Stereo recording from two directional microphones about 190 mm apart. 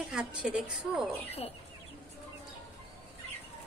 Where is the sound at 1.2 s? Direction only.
30° left (ahead or behind).